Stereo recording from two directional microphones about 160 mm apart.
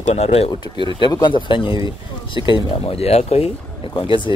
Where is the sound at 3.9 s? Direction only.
30° left (ahead or behind).